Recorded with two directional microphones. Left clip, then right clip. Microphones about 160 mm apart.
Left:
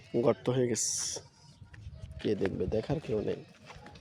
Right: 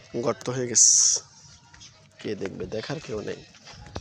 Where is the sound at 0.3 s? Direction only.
20° left (ahead or behind).